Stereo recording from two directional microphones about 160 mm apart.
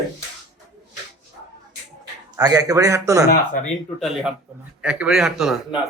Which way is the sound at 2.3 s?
25° right (ahead or behind).